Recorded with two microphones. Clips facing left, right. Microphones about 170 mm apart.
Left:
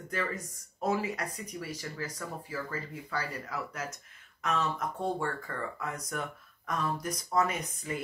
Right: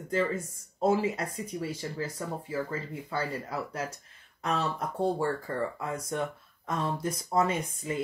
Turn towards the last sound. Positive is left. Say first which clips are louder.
# right 4 dB
turn(degrees=-25)  # may be behind; listen again after turning